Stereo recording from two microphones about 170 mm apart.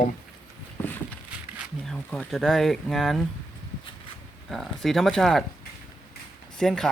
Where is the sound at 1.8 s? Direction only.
5° left (ahead or behind).